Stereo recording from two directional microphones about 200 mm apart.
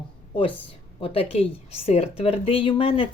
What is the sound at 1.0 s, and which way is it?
A woman's voice, 30° left (ahead or behind).